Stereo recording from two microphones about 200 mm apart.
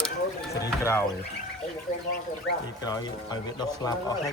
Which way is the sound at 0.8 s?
15° left (ahead or behind).